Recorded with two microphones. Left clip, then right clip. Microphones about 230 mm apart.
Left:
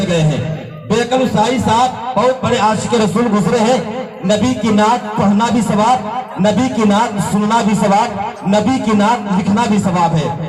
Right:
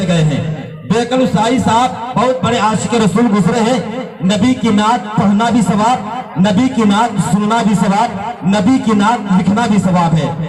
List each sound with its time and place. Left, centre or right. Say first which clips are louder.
0.9 s a man's voice: even; right